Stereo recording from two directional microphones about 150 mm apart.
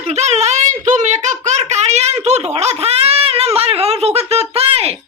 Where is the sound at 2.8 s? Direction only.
40° right (ahead or behind).